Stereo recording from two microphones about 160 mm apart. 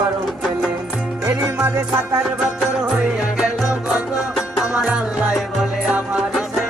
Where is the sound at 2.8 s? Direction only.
5° right (ahead or behind).